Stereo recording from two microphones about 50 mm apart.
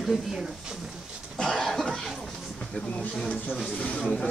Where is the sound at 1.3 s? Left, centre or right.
Centre.